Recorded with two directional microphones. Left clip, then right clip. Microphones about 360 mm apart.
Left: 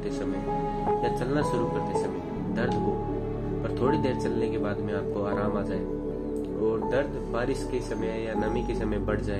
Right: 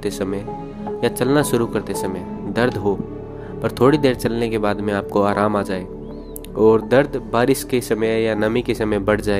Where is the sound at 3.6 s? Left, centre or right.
Right.